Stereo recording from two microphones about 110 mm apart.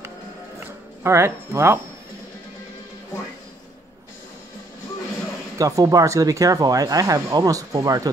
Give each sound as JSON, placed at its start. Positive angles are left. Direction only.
{"t": 1.0, "sound": "speech", "side_deg": -25}
{"t": 5.6, "sound": "speech", "side_deg": -30}